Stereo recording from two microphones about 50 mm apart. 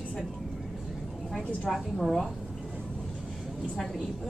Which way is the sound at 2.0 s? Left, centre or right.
Centre.